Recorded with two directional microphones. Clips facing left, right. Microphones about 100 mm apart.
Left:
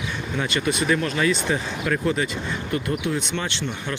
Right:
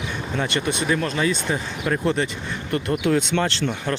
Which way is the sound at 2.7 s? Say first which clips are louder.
Right 5 dB; 60° right (ahead or behind).